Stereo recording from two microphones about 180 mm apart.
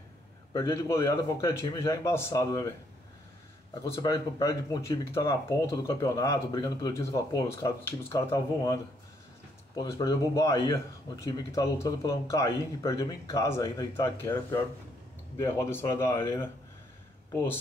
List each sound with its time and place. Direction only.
0.5 s a man's voice: 25° left (ahead or behind)
3.8 s a man's voice: 20° left (ahead or behind)
9.8 s a man's voice: 20° left (ahead or behind)